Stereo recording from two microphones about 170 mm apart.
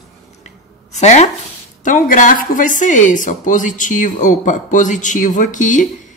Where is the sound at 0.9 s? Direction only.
45° left (ahead or behind).